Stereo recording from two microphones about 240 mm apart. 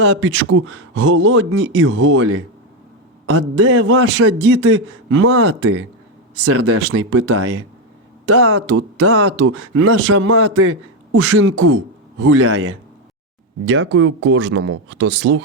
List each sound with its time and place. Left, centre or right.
0.0 s speech: right